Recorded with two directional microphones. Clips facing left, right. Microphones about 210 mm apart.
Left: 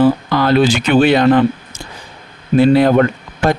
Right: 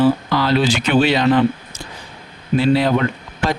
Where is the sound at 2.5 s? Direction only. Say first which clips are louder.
Left 6 dB; 50° left (ahead or behind).